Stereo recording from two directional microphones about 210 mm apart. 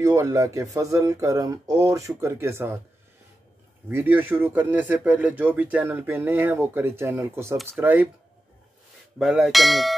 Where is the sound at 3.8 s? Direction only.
10° right (ahead or behind).